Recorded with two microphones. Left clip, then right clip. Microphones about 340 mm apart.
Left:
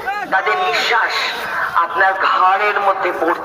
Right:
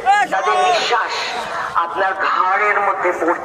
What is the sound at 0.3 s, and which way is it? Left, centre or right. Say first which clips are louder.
A man's voice: right 1 dB; centre.